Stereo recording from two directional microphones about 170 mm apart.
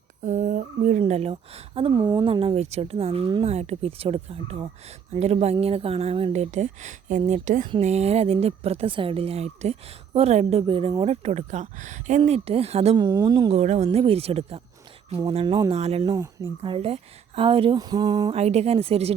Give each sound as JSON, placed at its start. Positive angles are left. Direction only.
{"t": 0.2, "sound": "speech", "side_deg": -45}
{"t": 1.9, "sound": "speech", "side_deg": -20}
{"t": 3.5, "sound": "speech", "side_deg": -40}
{"t": 13.0, "sound": "a woman's voice", "side_deg": -25}
{"t": 13.5, "sound": "a woman's voice", "side_deg": -40}